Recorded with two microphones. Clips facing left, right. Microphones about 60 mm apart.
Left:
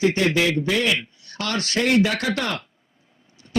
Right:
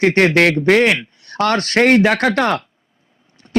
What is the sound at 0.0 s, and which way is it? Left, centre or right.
A man's voice, right.